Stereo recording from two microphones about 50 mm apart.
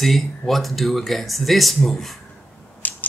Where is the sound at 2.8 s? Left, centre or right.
Left.